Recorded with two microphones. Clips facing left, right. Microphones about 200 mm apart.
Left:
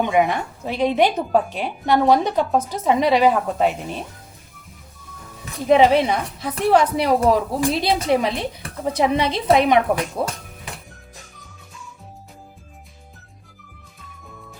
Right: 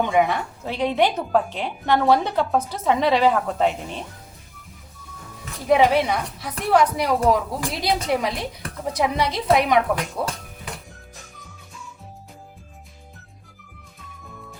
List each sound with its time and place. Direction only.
0.0 s a woman's voice: 15° left (ahead or behind)
5.6 s a woman's voice: 25° left (ahead or behind)